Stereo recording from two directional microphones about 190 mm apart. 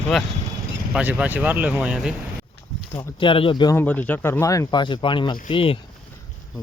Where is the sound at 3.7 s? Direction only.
10° left (ahead or behind); by 5.8 s 30° left (ahead or behind).